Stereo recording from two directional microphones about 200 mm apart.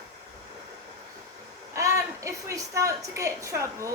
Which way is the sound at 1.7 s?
15° right (ahead or behind).